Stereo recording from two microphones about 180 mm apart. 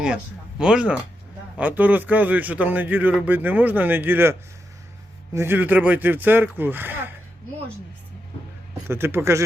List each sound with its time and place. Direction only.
0.6 s a man's voice: 5° right (ahead or behind)
8.9 s a man's voice: 15° right (ahead or behind)